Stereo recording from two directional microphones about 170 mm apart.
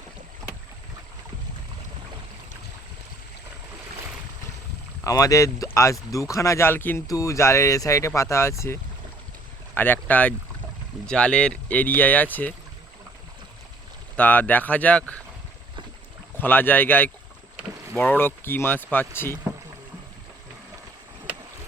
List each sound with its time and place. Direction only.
5.0 s speech: 20° left (ahead or behind)
14.2 s speech: 10° left (ahead or behind)
16.4 s speech: 10° left (ahead or behind)